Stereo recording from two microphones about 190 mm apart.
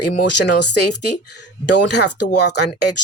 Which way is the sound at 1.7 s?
65° left (ahead or behind).